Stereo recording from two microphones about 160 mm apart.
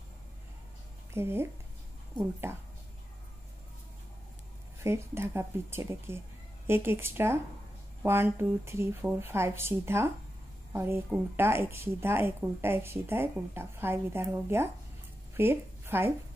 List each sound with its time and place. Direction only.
1.1 s a woman's voice: 15° right (ahead or behind)
2.1 s a woman's voice: 30° left (ahead or behind)
4.8 s a woman's voice: 15° right (ahead or behind)